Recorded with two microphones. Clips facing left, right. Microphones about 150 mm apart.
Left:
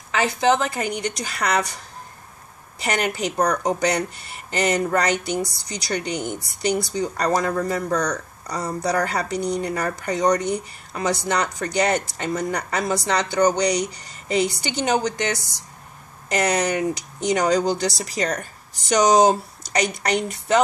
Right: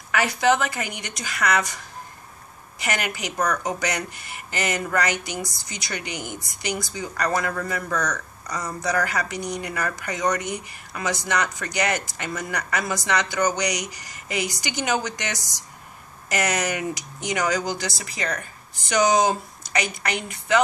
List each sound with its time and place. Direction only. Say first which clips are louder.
0.1 s speech: left 1 dB; 25° left (ahead or behind)
2.8 s speech: left 5 dB; 35° left (ahead or behind)
16.3 s speech: left 4 dB; 30° left (ahead or behind)